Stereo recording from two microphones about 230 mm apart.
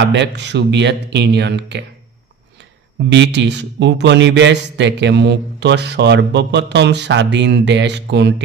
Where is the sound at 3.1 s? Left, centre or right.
Right.